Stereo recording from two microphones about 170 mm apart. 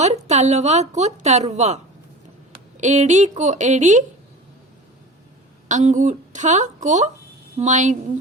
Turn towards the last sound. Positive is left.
turn(degrees=-45)  # may be behind; listen again after turning